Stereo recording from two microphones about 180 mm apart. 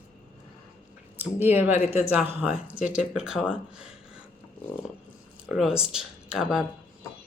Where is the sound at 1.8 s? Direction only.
35° left (ahead or behind).